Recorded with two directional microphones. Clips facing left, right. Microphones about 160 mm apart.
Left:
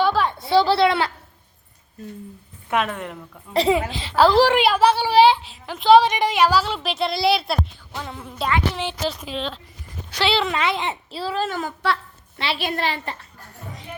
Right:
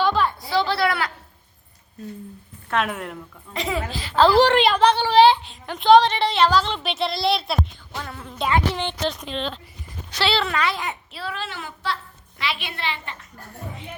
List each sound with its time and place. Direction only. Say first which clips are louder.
0.0 s a sound: left 1 dB; 10° left (ahead or behind)
0.3 s a sound: left 5 dB; 25° left (ahead or behind)
2.7 s speech: left 1 dB; centre (ahead or behind)
3.5 s a woman's voice: left 9 dB; 35° left (ahead or behind)
3.8 s a child's voice: left 3 dB; 20° left (ahead or behind)
4.4 s a woman's voice: even; 5° left (ahead or behind)
8.0 s a woman's voice: left 2 dB; 15° left (ahead or behind)
8.7 s speech: even; 5° left (ahead or behind)
10.1 s a child's voice: left 2 dB; 15° left (ahead or behind); by 11.4 s 30° left (ahead or behind)
11.4 s a woman's voice: left 6 dB; 45° left (ahead or behind)